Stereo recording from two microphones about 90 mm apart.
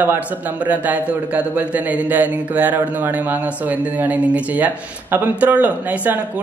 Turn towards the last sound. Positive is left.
turn(degrees=-15)  # may be behind; listen again after turning